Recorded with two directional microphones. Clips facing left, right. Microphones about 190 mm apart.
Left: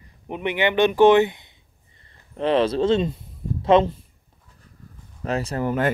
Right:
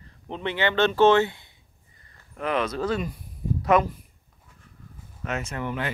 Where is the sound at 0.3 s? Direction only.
15° left (ahead or behind).